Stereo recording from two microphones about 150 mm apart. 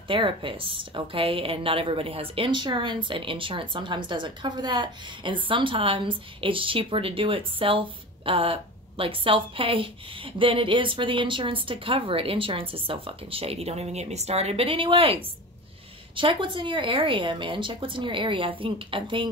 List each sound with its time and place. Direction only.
0.1 s a woman's voice: 35° right (ahead or behind)
16.2 s a woman's voice: 35° right (ahead or behind)